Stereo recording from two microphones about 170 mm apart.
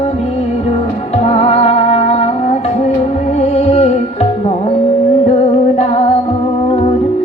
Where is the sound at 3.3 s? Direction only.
40° left (ahead or behind).